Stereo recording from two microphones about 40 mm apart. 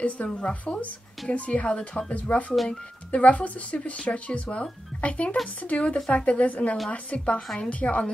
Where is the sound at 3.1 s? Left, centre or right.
Left.